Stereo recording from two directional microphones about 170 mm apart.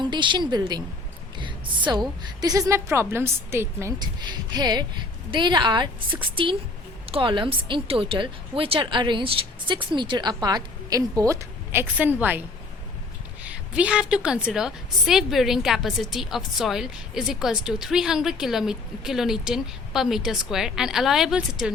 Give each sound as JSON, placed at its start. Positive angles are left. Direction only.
{"t": 0.0, "sound": "speech", "side_deg": -25}
{"t": 13.4, "sound": "a woman's voice", "side_deg": -5}